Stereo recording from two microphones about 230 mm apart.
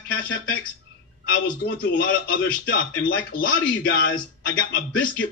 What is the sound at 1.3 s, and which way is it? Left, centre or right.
A man's voice, left.